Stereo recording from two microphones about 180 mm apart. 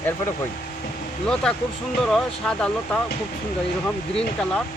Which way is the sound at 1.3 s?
5° left (ahead or behind).